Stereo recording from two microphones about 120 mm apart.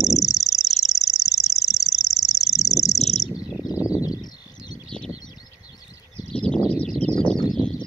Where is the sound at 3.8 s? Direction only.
30° left (ahead or behind).